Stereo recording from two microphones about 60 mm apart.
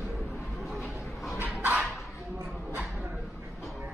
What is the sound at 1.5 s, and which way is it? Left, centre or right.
Dog, right.